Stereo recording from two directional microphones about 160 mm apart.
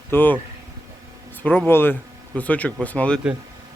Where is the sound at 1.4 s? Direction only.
10° left (ahead or behind).